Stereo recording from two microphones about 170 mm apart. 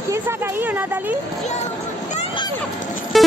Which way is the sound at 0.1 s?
10° right (ahead or behind).